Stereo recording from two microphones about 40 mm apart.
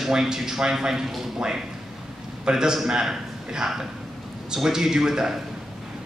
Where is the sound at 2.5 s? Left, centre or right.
Centre.